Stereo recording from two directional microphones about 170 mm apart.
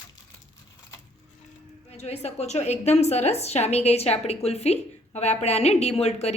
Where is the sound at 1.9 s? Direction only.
40° left (ahead or behind).